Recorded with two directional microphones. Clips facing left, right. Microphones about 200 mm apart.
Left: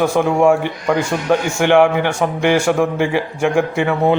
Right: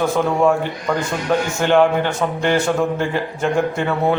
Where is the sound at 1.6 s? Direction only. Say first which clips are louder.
Left 2 dB; 15° left (ahead or behind).